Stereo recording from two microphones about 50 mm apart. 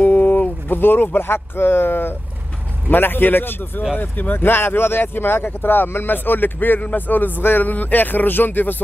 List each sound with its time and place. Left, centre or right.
0.0 s speech: left